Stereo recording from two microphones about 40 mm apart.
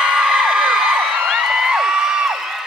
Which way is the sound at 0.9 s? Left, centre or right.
Right.